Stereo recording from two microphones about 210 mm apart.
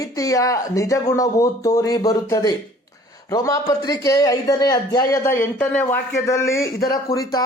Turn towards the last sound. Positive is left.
turn(degrees=15)  # may be behind; listen again after turning